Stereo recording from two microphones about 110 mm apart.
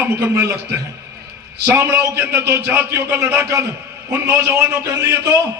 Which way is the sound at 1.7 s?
25° right (ahead or behind).